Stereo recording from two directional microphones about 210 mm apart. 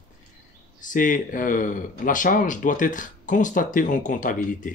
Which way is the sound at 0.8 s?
40° left (ahead or behind).